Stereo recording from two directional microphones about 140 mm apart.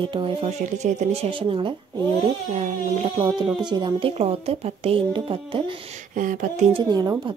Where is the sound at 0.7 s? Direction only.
60° right (ahead or behind).